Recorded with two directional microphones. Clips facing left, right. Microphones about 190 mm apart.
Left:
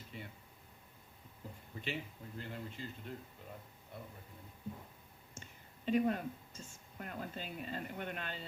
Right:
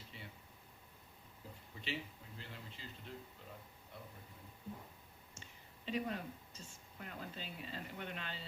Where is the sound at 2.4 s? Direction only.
50° left (ahead or behind).